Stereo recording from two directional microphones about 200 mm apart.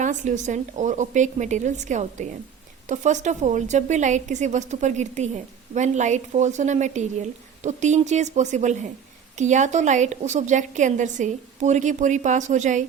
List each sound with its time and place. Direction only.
0.0 s a woman's voice: 40° right (ahead or behind)